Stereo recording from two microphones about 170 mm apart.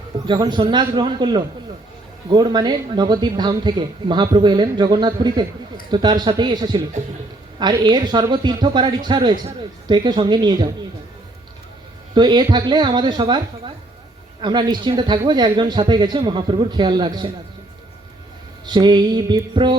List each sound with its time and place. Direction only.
0.3 s speech: 25° right (ahead or behind)
12.1 s speech: 25° right (ahead or behind)
18.6 s speech: 25° right (ahead or behind)